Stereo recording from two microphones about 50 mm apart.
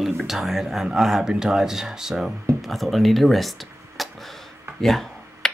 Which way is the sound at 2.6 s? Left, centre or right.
Centre.